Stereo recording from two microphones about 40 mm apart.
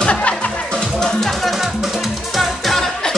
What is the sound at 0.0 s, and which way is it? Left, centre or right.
Music, left.